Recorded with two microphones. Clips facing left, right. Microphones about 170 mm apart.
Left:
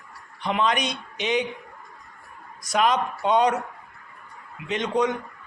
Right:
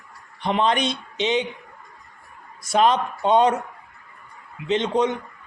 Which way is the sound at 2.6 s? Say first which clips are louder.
Right 3 dB; 30° right (ahead or behind).